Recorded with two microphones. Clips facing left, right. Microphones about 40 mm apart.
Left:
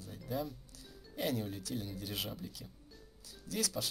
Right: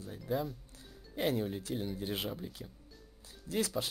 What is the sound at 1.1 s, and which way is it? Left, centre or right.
Speech, right.